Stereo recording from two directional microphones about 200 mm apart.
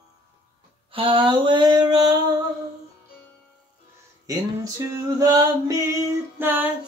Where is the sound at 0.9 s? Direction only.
25° right (ahead or behind).